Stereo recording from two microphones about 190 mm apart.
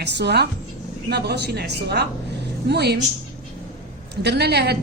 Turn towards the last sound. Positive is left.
turn(degrees=-60)  # may be behind; listen again after turning